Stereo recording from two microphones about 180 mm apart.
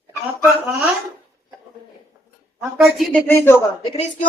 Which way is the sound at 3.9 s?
35° left (ahead or behind).